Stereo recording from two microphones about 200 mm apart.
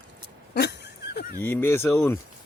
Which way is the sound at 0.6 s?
55° left (ahead or behind).